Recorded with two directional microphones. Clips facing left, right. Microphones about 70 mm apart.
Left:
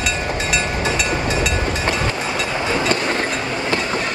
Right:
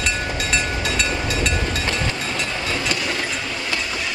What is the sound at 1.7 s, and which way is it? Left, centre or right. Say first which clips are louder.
Train: left 3 dB; left.